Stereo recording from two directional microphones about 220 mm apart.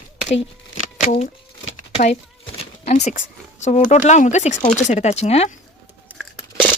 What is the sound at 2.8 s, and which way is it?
Speech, 30° left (ahead or behind).